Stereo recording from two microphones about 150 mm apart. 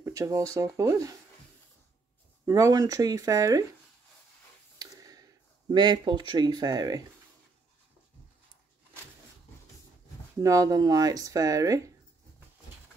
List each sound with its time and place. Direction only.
0.0 s speech: 20° right (ahead or behind)
2.4 s speech: 20° right (ahead or behind)
4.7 s a sound: 25° right (ahead or behind)
6.3 s speech: 25° right (ahead or behind)
10.4 s speech: 20° right (ahead or behind)